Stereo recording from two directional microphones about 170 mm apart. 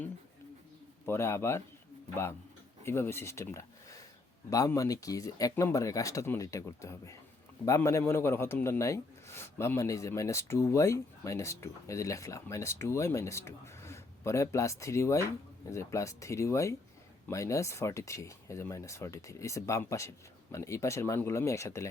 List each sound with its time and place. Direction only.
1.0 s a man's voice: 15° left (ahead or behind)
2.8 s a man's voice: 15° left (ahead or behind)